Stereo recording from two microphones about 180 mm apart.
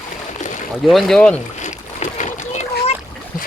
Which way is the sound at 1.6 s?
40° left (ahead or behind).